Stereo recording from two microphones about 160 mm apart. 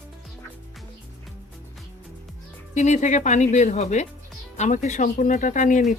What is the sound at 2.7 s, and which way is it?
Speech, 45° left (ahead or behind).